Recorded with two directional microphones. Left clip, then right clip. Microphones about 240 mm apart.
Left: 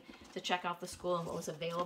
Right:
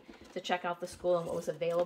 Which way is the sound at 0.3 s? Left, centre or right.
Centre.